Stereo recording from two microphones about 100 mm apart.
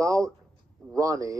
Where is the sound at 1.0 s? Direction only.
35° right (ahead or behind).